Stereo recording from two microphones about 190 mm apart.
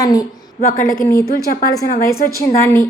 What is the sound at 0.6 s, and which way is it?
A woman's voice, 50° left (ahead or behind).